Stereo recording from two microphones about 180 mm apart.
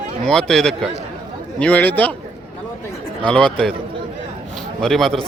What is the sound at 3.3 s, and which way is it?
Speech, 5° left (ahead or behind).